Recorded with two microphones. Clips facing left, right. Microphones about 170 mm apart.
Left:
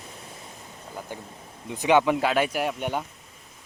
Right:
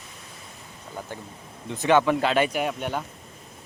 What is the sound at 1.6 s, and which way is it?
Speech, 15° left (ahead or behind).